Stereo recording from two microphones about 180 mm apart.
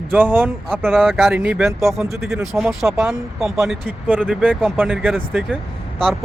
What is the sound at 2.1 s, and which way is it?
Speech, centre (ahead or behind).